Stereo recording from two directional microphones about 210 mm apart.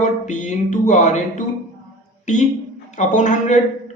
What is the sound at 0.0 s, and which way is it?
A man's voice, 35° left (ahead or behind).